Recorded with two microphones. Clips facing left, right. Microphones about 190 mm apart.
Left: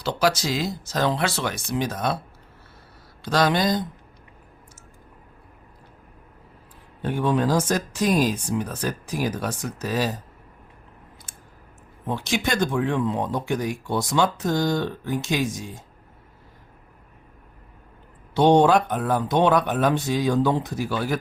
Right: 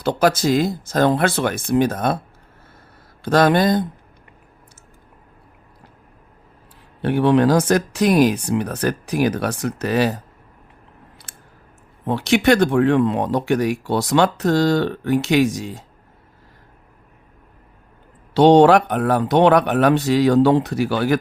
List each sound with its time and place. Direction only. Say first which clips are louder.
0.0 s speech: right 6 dB; 50° right (ahead or behind)
3.2 s speech: right 6 dB; 55° right (ahead or behind)
7.0 s speech: right 7 dB; 70° right (ahead or behind)
12.0 s speech: right 10 dB; 65° right (ahead or behind)
18.3 s speech: right 5 dB; 75° right (ahead or behind)